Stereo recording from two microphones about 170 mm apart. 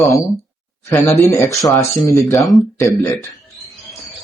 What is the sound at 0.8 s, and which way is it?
Speech, 15° left (ahead or behind).